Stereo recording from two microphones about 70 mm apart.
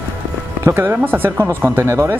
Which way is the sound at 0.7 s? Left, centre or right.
Right.